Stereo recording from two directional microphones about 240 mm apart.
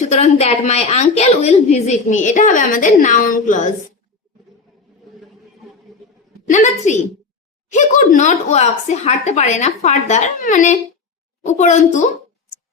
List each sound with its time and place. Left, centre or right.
0.0 s a woman's voice: left
6.5 s a woman's voice: left